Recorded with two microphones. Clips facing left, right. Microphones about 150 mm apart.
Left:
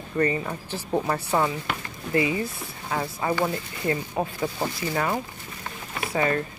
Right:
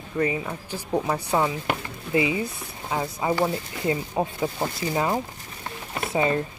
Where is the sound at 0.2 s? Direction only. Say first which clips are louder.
Left 1 dB; 5° right (ahead or behind).